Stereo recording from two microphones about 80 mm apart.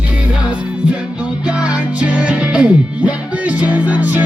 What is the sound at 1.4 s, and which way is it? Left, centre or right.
Music, centre.